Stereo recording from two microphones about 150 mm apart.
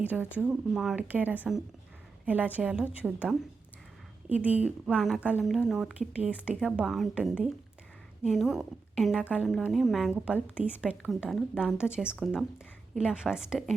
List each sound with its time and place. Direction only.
0.0 s a woman's voice: 10° right (ahead or behind)